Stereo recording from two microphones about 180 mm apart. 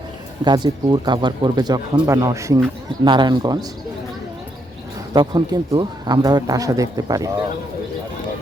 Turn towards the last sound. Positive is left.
turn(degrees=-20)  # may be behind; listen again after turning